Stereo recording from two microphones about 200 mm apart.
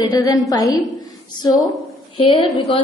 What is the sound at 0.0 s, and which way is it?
Speech, 20° left (ahead or behind).